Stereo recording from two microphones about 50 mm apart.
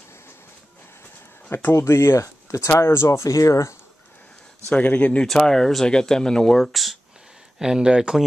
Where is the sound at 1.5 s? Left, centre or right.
Left.